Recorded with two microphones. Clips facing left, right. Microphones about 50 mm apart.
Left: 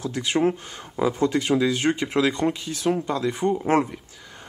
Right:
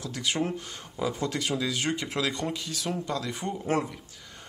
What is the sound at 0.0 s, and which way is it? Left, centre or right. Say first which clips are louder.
Speech: left 7 dB; left.